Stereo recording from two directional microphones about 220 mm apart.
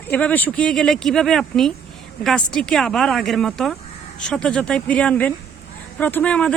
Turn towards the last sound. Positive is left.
turn(degrees=5)  # may be behind; listen again after turning